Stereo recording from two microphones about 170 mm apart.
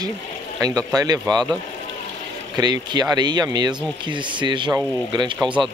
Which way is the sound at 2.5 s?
25° right (ahead or behind).